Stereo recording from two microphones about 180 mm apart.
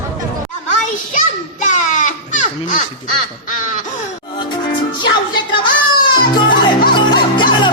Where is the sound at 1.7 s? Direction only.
45° left (ahead or behind).